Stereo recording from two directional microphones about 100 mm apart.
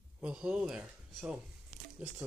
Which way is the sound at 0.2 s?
10° right (ahead or behind).